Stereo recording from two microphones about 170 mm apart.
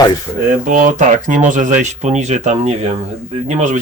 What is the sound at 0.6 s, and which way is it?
Speech, 50° right (ahead or behind).